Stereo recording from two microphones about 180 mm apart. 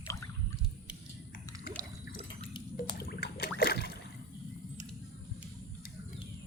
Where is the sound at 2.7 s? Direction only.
60° left (ahead or behind).